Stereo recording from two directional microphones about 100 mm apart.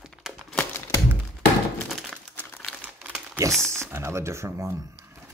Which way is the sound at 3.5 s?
5° left (ahead or behind).